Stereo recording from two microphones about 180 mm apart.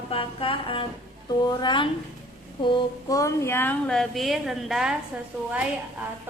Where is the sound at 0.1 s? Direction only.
30° left (ahead or behind).